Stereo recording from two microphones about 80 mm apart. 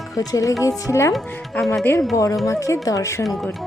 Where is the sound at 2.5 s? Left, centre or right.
Left.